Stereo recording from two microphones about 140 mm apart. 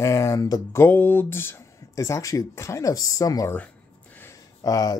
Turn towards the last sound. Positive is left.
turn(degrees=25)  # may be behind; listen again after turning